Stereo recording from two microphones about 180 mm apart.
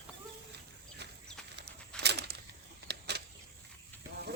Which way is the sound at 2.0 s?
70° right (ahead or behind).